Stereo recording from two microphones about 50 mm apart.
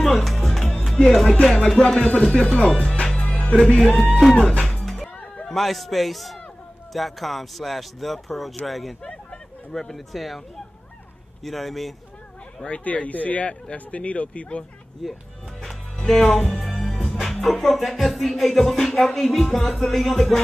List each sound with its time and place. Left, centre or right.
0.1 s music: centre
2.0 s speech: left
2.6 s music: centre; by 3.5 s left
3.5 s music: centre
9.0 s speech: centre
11.4 s music: centre
12.6 s speech: left
15.0 s music: centre